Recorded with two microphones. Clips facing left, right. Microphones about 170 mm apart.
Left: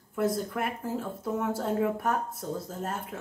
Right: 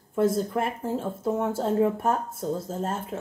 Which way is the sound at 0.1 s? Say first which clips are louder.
Right 5 dB; 25° right (ahead or behind).